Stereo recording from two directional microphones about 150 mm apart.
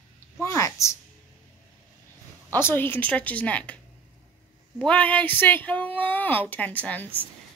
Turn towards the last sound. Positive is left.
turn(degrees=10)  # may be behind; listen again after turning